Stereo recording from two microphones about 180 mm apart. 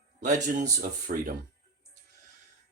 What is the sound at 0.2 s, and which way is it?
Speech, 45° right (ahead or behind).